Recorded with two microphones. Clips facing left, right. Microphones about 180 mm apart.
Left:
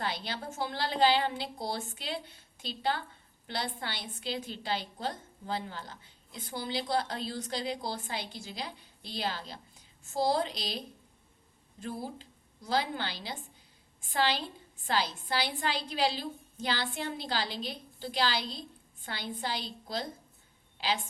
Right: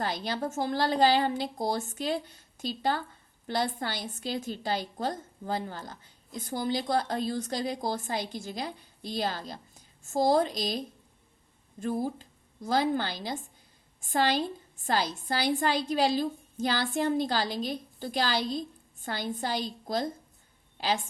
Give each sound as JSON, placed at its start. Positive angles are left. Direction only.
{"t": 0.0, "sound": "a woman's voice", "side_deg": -45}